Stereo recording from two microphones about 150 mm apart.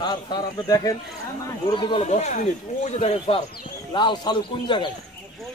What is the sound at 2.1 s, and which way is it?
Speech, 50° left (ahead or behind).